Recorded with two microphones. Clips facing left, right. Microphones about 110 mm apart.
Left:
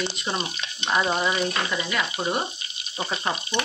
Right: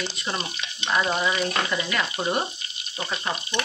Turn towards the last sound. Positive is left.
turn(degrees=25)  # may be behind; listen again after turning